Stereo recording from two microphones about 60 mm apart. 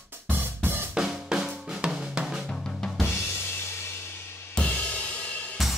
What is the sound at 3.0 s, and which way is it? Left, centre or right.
Drum kit, left.